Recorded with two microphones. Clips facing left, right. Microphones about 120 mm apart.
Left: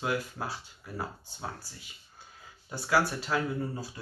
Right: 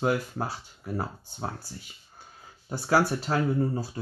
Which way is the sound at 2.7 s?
40° right (ahead or behind).